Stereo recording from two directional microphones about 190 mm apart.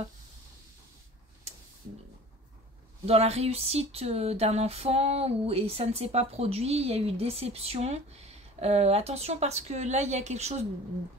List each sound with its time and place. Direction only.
3.1 s speech: 35° right (ahead or behind)